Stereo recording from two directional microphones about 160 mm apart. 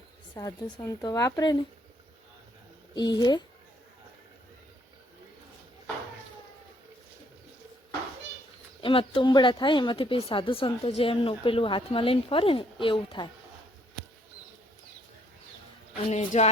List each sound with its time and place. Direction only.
0.3 s a woman's voice: 20° left (ahead or behind)
2.9 s a woman's voice: 25° left (ahead or behind)
8.8 s speech: 35° left (ahead or behind)
16.0 s speech: 45° left (ahead or behind)